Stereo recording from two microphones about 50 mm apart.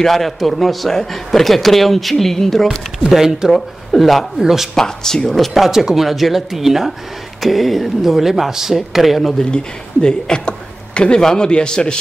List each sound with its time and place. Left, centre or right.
0.0 s speech: centre
3.1 s speech: centre
4.7 s speech: centre
5.5 s speech: centre
9.4 s speech: centre